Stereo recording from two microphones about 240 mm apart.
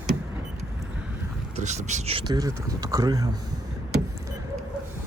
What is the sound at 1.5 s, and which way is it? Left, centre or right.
Speech, right.